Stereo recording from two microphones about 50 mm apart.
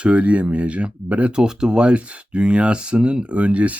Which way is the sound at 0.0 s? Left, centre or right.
Right.